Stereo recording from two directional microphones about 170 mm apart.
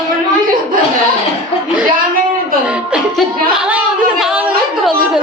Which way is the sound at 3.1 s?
5° right (ahead or behind).